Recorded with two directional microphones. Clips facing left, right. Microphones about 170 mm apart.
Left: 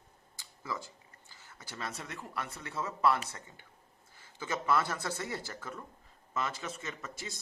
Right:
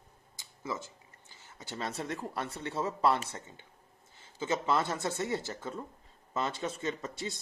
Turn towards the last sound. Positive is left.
turn(degrees=-30)  # may be behind; listen again after turning